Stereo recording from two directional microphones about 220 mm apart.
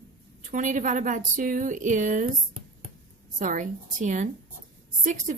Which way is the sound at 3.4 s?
35° right (ahead or behind).